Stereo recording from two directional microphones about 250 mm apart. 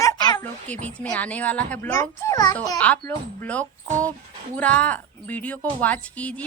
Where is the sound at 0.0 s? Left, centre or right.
Centre.